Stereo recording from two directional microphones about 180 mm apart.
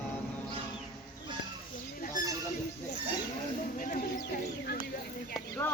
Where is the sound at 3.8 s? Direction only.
45° left (ahead or behind).